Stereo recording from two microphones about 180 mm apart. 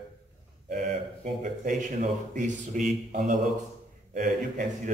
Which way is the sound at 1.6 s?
45° right (ahead or behind).